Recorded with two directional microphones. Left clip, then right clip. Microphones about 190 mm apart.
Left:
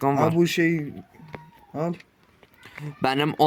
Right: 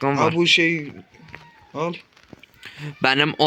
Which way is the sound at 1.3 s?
40° left (ahead or behind).